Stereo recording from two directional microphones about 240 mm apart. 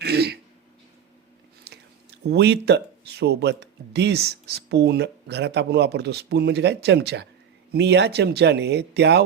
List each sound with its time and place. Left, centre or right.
0.0 s throat clearing: right
2.2 s speech: right